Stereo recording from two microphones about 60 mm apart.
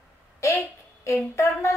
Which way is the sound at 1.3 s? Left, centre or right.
Left.